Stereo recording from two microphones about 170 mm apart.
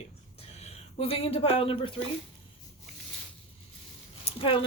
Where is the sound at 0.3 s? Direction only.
35° left (ahead or behind).